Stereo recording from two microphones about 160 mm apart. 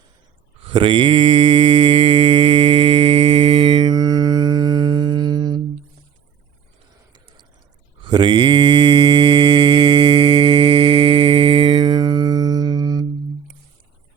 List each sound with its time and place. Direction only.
0.6 s mantra: 35° right (ahead or behind)
7.1 s a sound: 30° right (ahead or behind)
8.0 s mantra: 30° right (ahead or behind)